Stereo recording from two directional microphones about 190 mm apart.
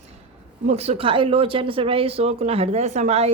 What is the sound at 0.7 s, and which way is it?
Speech, 35° right (ahead or behind).